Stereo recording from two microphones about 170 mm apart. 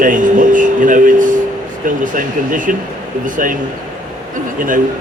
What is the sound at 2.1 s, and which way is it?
A man's voice, 50° right (ahead or behind).